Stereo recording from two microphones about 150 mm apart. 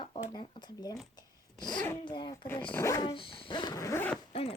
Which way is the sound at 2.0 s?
30° left (ahead or behind).